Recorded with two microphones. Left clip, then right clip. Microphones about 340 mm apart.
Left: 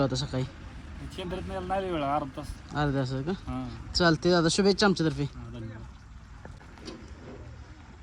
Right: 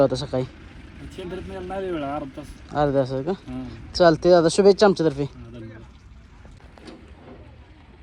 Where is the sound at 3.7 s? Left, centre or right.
Centre.